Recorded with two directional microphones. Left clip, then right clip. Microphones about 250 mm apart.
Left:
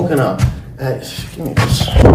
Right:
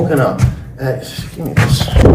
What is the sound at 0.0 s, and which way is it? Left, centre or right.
Speech, centre.